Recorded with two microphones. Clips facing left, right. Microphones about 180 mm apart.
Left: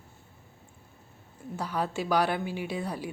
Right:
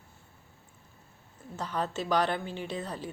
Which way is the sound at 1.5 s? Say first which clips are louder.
Left 2 dB; 10° left (ahead or behind).